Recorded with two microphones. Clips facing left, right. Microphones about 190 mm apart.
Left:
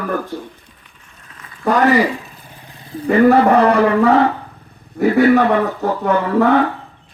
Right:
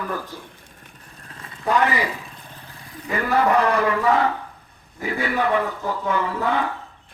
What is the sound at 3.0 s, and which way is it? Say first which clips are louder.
Speech: left 10 dB; 60° left (ahead or behind).